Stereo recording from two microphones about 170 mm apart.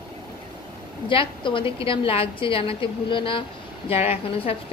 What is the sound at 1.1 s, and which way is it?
A woman's voice, 30° left (ahead or behind).